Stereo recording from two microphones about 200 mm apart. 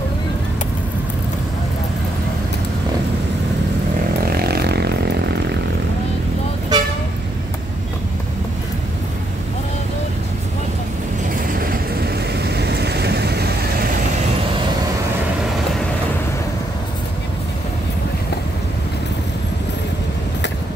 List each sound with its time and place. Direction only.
4.5 s vehicle: 55° right (ahead or behind)
6.7 s vehicle: 20° right (ahead or behind)
11.3 s vehicle: 45° right (ahead or behind)